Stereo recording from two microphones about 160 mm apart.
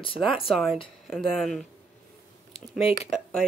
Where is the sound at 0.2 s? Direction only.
Centre (ahead or behind).